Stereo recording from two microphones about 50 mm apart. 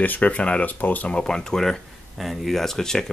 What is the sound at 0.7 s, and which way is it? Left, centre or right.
Speech, left.